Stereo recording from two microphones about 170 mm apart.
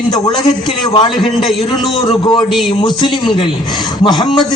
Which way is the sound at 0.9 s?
30° left (ahead or behind).